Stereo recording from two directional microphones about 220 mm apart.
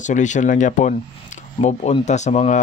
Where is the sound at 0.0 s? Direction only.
35° left (ahead or behind).